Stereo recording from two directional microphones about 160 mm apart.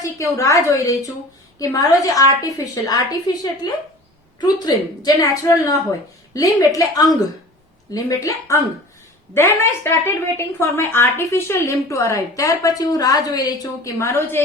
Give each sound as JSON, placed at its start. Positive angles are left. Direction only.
{"t": 0.0, "sound": "a woman's voice", "side_deg": 20}